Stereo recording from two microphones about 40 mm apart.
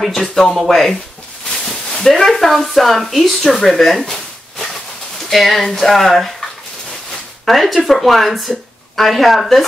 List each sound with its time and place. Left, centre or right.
0.0 s speech: centre
1.5 s a sound: centre
2.0 s speech: centre
3.6 s a sound: centre
5.3 s speech: centre
7.4 s speech: centre